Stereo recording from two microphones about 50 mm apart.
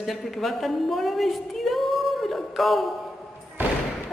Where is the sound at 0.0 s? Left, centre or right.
Centre.